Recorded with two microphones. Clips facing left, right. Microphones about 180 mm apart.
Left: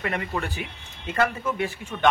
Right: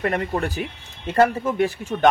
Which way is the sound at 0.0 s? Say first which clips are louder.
Right 5 dB; 45° right (ahead or behind).